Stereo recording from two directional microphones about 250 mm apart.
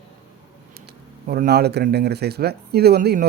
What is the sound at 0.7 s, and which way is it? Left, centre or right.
A man's voice, right.